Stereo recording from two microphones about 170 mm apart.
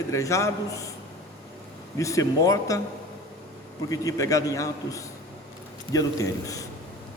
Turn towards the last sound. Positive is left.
turn(degrees=20)  # may be behind; listen again after turning